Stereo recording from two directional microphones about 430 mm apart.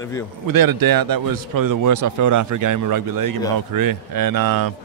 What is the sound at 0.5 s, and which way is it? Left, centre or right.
Speech, right.